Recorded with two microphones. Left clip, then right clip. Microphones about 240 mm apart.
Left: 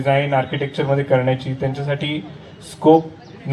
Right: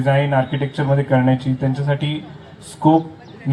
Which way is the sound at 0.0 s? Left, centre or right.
Left.